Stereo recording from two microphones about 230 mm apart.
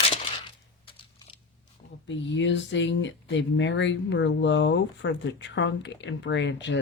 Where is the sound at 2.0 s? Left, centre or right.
Left.